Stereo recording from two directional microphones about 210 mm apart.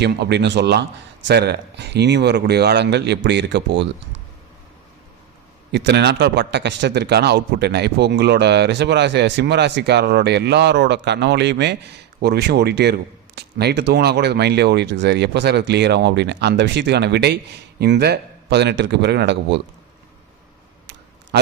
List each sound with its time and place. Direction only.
0.0 s speech: 55° right (ahead or behind)
5.7 s a man's voice: 55° right (ahead or behind)